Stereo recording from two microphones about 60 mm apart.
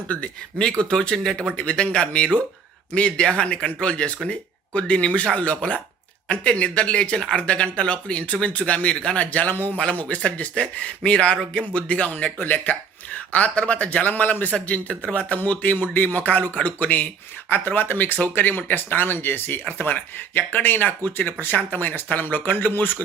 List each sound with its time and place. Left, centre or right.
0.8 s speech: centre; by 23.0 s left